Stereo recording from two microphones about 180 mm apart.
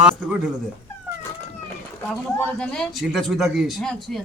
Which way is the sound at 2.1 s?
5° left (ahead or behind).